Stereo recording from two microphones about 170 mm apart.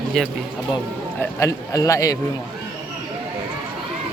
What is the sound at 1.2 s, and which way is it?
Speech, 20° left (ahead or behind).